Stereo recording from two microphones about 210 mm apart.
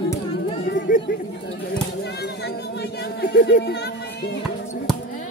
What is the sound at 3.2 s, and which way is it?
Speech, 50° left (ahead or behind).